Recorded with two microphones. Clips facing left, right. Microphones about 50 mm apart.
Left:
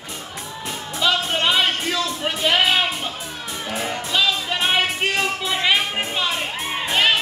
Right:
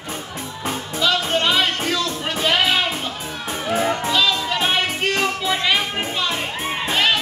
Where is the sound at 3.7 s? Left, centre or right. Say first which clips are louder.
Right 7 dB; right.